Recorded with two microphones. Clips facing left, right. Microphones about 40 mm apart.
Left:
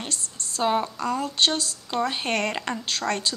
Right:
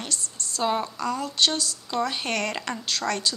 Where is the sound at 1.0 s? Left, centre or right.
Left.